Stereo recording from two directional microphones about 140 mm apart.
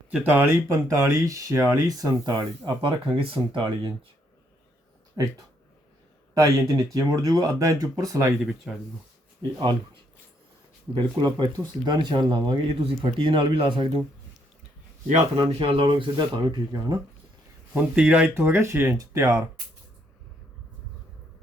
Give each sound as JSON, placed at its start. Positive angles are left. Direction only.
{"t": 0.1, "sound": "speech", "side_deg": -15}
{"t": 5.2, "sound": "speech", "side_deg": -25}
{"t": 6.3, "sound": "speech", "side_deg": -25}
{"t": 8.4, "sound": "speech", "side_deg": -5}
{"t": 9.6, "sound": "speech", "side_deg": -35}
{"t": 11.1, "sound": "speech", "side_deg": -30}
{"t": 15.4, "sound": "speech", "side_deg": -40}
{"t": 17.7, "sound": "speech", "side_deg": -10}